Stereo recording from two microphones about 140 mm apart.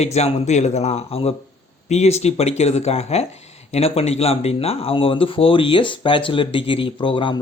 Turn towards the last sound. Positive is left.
turn(degrees=35)  # may be behind; listen again after turning